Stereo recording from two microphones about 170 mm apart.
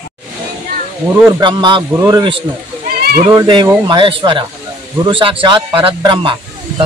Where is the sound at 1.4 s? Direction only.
25° right (ahead or behind).